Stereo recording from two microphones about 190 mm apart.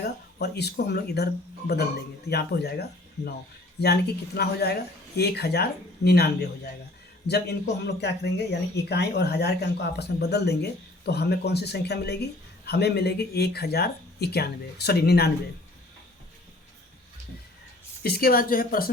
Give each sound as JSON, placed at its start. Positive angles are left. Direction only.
{"t": 0.0, "sound": "speech", "side_deg": 55}
{"t": 18.0, "sound": "speech", "side_deg": 55}